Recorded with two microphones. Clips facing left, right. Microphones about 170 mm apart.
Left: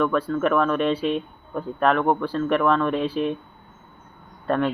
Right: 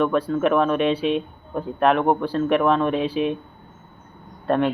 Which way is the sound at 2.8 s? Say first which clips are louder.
Right 1 dB; 5° right (ahead or behind).